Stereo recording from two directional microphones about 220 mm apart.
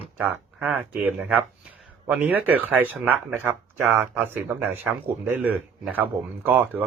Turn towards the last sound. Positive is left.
turn(degrees=-10)  # may be behind; listen again after turning